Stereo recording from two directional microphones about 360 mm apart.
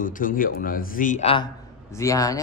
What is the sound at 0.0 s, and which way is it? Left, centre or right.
A man's voice, left.